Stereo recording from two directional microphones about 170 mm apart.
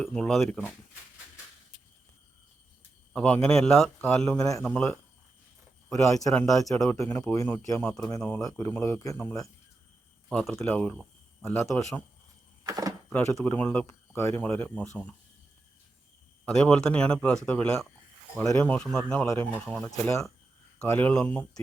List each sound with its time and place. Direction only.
0.0 s speech: 5° left (ahead or behind)
3.1 s a man's voice: 5° left (ahead or behind)
5.9 s speech: 20° left (ahead or behind)
6.3 s speech: 5° left (ahead or behind)
6.9 s speech: 15° left (ahead or behind)
10.2 s speech: centre (ahead or behind)
12.6 s speech: 20° right (ahead or behind)
13.1 s speech: 10° left (ahead or behind)
16.5 s speech: 5° left (ahead or behind)